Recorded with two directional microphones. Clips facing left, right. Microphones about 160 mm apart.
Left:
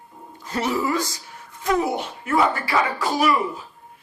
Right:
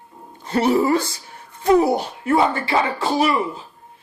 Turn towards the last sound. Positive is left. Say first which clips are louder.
# right 1 dB
turn(degrees=-30)  # may be behind; listen again after turning